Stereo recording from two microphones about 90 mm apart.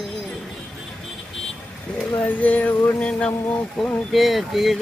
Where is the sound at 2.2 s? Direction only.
20° left (ahead or behind).